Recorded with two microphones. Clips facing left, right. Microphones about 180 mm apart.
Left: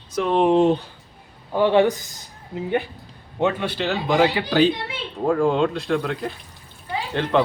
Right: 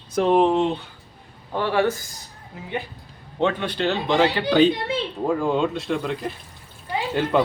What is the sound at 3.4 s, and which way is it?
Speech, 10° left (ahead or behind).